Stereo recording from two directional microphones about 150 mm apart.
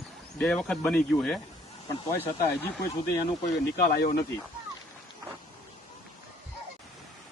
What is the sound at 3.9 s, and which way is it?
Speech, 60° left (ahead or behind).